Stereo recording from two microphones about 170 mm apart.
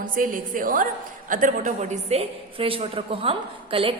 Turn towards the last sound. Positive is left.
turn(degrees=-35)  # may be behind; listen again after turning